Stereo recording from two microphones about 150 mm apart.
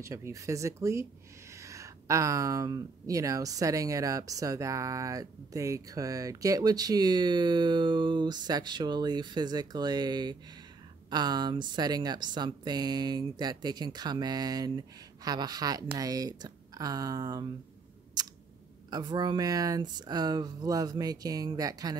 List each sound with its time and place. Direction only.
0.0 s speech: 20° right (ahead or behind)
18.9 s speech: 30° right (ahead or behind)